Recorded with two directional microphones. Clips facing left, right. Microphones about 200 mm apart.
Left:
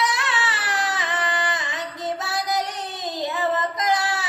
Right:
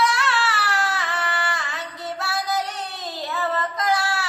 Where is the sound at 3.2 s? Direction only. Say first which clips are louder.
Left 2 dB; 20° left (ahead or behind).